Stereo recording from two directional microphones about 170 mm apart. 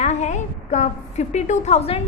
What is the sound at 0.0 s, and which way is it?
A woman's voice, 40° left (ahead or behind).